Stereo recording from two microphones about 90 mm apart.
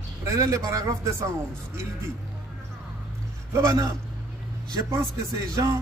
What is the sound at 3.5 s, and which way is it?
Speech, 30° right (ahead or behind).